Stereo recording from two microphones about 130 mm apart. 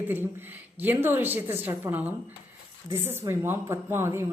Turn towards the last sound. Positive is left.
turn(degrees=-20)  # may be behind; listen again after turning